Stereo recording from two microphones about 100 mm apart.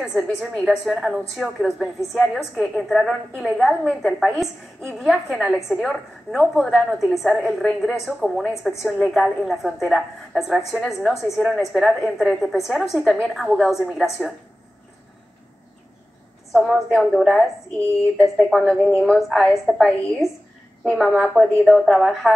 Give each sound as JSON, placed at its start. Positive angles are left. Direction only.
{"t": 0.0, "sound": "a woman's voice", "side_deg": 0}
{"t": 16.5, "sound": "a woman's voice", "side_deg": 0}
{"t": 20.8, "sound": "a woman's voice", "side_deg": 0}